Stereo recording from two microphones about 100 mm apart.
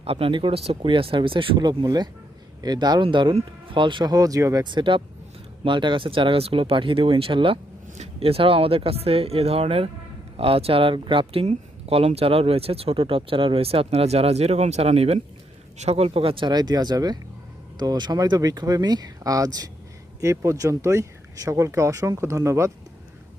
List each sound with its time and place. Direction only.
0.0 s speech: 70° right (ahead or behind); by 4.1 s 55° right (ahead or behind)
4.1 s speech: 35° right (ahead or behind)
4.6 s speech: 50° right (ahead or behind)
16.5 s speech: 40° right (ahead or behind)